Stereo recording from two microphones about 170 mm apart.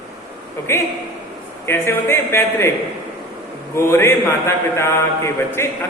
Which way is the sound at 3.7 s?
15° left (ahead or behind).